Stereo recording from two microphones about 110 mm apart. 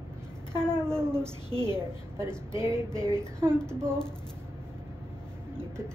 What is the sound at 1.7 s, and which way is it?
A woman's voice, 25° right (ahead or behind).